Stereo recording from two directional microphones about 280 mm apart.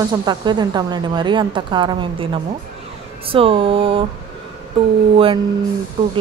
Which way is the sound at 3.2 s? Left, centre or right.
Centre.